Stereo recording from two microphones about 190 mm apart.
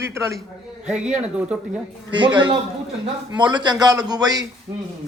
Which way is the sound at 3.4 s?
25° right (ahead or behind).